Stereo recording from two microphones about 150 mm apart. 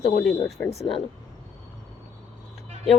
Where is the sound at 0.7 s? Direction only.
40° left (ahead or behind).